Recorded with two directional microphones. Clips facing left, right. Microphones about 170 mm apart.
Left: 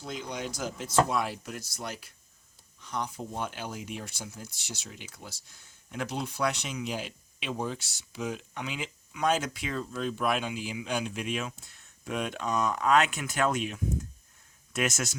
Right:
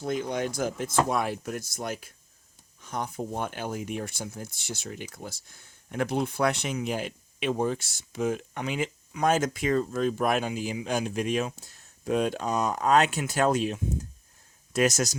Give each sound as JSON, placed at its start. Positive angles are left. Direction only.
{"t": 0.0, "sound": "speech", "side_deg": -50}